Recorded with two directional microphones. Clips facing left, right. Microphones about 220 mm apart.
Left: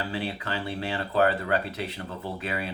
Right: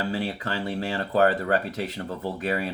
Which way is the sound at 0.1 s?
40° right (ahead or behind).